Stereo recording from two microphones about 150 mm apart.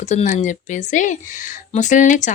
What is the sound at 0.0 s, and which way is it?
Speech, 50° left (ahead or behind).